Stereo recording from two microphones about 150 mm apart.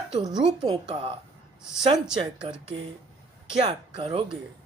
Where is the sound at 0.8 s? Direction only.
40° right (ahead or behind).